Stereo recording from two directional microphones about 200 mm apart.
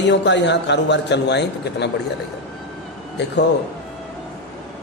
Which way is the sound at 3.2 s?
60° left (ahead or behind).